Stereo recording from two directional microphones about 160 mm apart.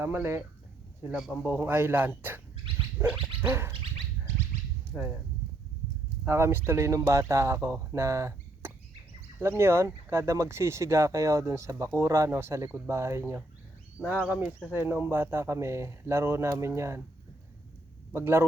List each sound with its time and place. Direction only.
0.0 s speech: 15° right (ahead or behind)
1.1 s a man's voice: centre (ahead or behind)
1.5 s speech: 15° right (ahead or behind)
3.4 s speech: 15° right (ahead or behind)
4.9 s a man's voice: 5° right (ahead or behind)
6.2 s speech: 15° right (ahead or behind)
18.1 s speech: 15° right (ahead or behind)